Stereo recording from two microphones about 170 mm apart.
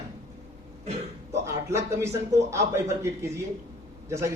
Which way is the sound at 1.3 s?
15° right (ahead or behind).